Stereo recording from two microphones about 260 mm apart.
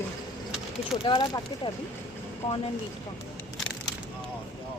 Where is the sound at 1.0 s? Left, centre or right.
Centre.